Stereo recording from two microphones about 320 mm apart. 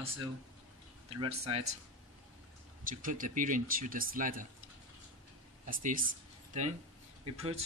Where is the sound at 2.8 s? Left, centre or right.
Right.